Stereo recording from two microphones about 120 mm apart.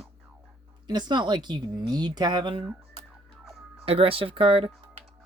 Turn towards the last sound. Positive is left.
turn(degrees=-45)  # may be behind; listen again after turning